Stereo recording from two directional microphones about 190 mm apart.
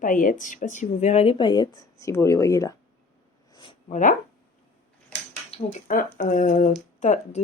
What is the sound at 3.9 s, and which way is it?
Speech, 45° left (ahead or behind).